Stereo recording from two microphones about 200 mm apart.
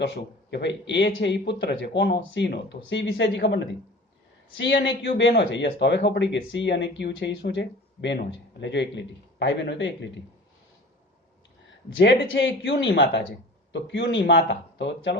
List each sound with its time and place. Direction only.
0.0 s a man's voice: 60° left (ahead or behind)
11.9 s a man's voice: 70° left (ahead or behind)